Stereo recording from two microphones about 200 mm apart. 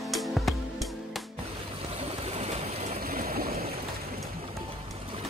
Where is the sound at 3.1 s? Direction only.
45° right (ahead or behind).